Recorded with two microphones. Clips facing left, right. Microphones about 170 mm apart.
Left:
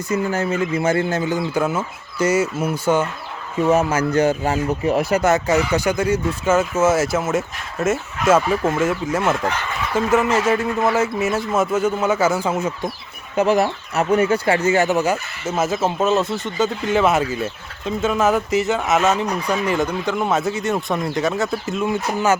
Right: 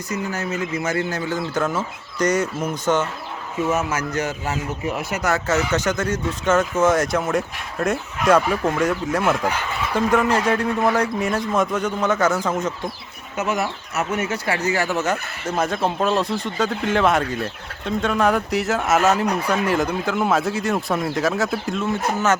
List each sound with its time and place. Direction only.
0.1 s speech: 30° left (ahead or behind); by 3.1 s 10° left (ahead or behind)
3.7 s speech: 30° left (ahead or behind)
5.3 s speech: 15° left (ahead or behind)
13.3 s speech: 35° left (ahead or behind); by 21.8 s centre (ahead or behind)
21.8 s speech: 10° left (ahead or behind)